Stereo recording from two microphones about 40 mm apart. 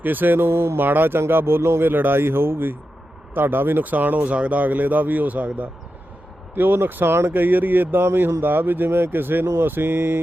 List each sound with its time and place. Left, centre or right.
0.0 s speech: right
0.9 s speech: right
3.8 s speech: right
6.6 s speech: right
7.3 s speech: right